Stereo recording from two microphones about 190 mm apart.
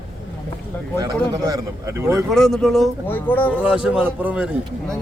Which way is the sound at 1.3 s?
20° right (ahead or behind).